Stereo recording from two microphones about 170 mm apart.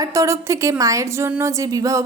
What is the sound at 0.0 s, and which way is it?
A woman's voice, 20° right (ahead or behind).